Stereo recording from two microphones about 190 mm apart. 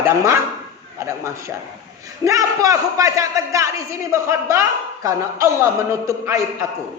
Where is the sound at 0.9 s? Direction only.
15° right (ahead or behind).